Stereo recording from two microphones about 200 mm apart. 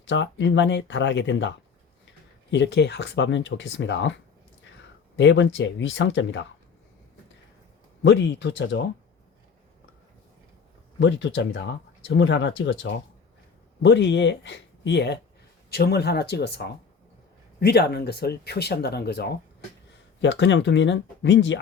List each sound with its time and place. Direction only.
0.0 s speech: 65° left (ahead or behind)
5.1 s speech: 65° left (ahead or behind)
8.0 s speech: 60° left (ahead or behind)
11.0 s speech: 65° left (ahead or behind)